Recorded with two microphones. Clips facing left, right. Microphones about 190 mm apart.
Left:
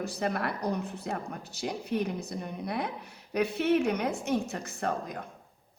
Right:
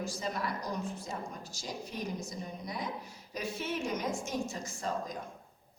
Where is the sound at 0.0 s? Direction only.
60° left (ahead or behind).